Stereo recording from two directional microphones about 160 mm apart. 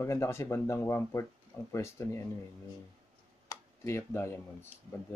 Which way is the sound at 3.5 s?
15° left (ahead or behind).